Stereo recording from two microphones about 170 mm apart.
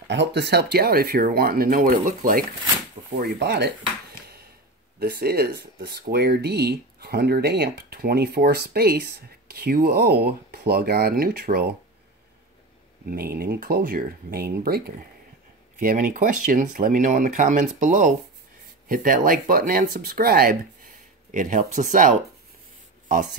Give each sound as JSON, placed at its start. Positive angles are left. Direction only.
{"t": 0.1, "sound": "speech", "side_deg": -85}
{"t": 3.2, "sound": "speech", "side_deg": -75}
{"t": 4.9, "sound": "speech", "side_deg": -65}
{"t": 13.1, "sound": "speech", "side_deg": -65}
{"t": 15.8, "sound": "speech", "side_deg": -55}
{"t": 21.3, "sound": "speech", "side_deg": -50}